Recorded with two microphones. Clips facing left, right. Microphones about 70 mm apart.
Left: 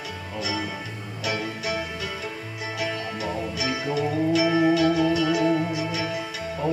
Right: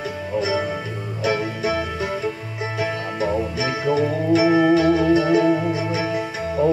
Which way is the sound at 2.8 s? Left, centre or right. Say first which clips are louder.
Right 6 dB; right.